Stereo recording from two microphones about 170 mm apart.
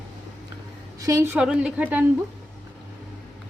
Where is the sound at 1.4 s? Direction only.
5° right (ahead or behind).